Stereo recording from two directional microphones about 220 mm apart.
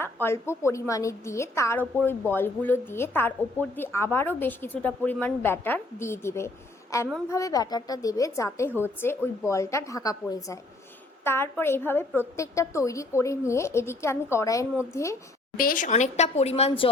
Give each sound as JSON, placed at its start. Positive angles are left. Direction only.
{"t": 0.0, "sound": "a woman's voice", "side_deg": 10}
{"t": 15.5, "sound": "speech", "side_deg": 40}